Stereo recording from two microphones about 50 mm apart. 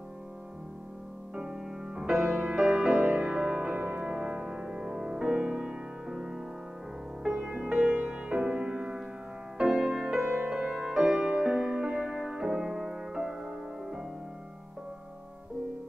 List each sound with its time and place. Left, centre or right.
1.3 s music: centre
3.0 s music: right
3.3 s music: centre
3.7 s music: right
10.2 s music: right
10.7 s music: centre